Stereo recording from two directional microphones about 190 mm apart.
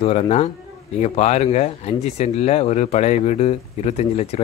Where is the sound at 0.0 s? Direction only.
30° left (ahead or behind).